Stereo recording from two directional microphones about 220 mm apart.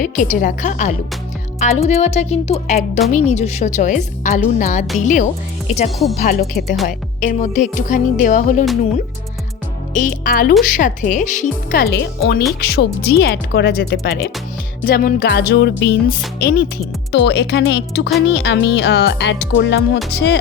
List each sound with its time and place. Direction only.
0.0 s a woman's voice: 40° left (ahead or behind)
9.9 s a woman's voice: 35° left (ahead or behind)